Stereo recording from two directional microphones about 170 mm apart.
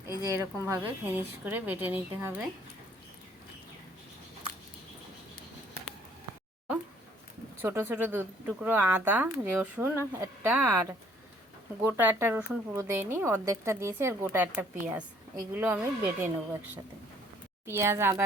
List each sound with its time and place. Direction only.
0.2 s speech: 15° right (ahead or behind)
7.6 s speech: 15° right (ahead or behind)